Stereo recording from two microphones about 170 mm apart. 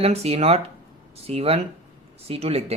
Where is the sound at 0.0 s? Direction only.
35° right (ahead or behind).